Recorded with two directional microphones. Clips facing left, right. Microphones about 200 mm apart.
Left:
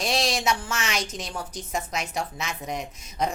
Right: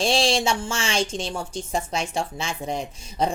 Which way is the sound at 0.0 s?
30° right (ahead or behind).